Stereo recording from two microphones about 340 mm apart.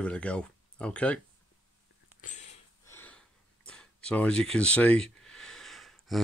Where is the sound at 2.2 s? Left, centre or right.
Left.